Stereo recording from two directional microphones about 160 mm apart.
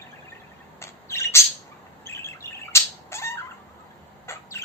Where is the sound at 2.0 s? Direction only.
15° left (ahead or behind).